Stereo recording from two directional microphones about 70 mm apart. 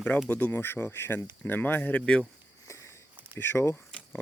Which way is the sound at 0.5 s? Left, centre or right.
Left.